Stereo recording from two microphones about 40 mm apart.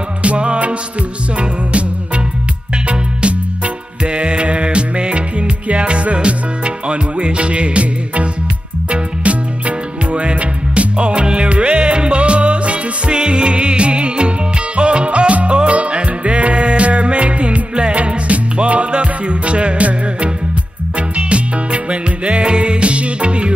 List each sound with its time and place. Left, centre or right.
0.2 s music: right
2.9 s music: right